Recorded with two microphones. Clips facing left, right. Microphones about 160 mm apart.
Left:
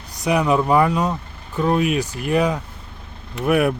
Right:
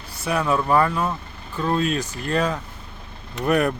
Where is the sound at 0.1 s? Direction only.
15° left (ahead or behind).